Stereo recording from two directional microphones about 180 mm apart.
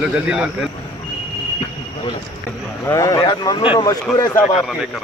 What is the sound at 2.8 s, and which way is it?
Speech, 15° left (ahead or behind).